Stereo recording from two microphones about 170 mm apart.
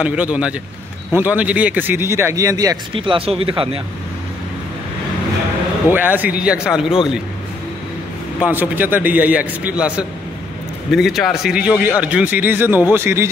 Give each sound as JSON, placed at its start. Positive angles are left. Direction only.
{"t": 0.0, "sound": "speech", "side_deg": -10}
{"t": 2.9, "sound": "speech", "side_deg": -30}
{"t": 5.9, "sound": "speech", "side_deg": -10}
{"t": 8.4, "sound": "speech", "side_deg": -10}